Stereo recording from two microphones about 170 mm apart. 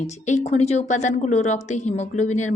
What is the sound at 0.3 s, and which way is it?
A woman's voice, 40° left (ahead or behind).